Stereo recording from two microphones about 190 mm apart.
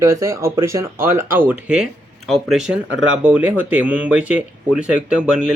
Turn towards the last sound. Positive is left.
turn(degrees=-5)  # may be behind; listen again after turning